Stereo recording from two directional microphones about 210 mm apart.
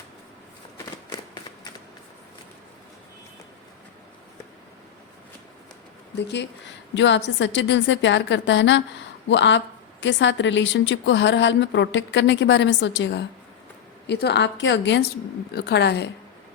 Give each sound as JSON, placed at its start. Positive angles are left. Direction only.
{"t": 6.1, "sound": "a woman's voice", "side_deg": 55}